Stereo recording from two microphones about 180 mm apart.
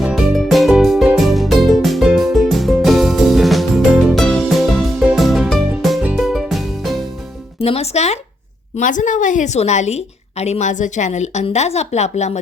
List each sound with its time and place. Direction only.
0.0 s music: 5° right (ahead or behind)
7.6 s a woman's voice: 35° left (ahead or behind)